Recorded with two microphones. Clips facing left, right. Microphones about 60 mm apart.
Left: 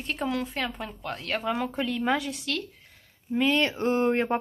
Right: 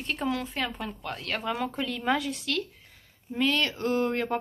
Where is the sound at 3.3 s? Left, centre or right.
Centre.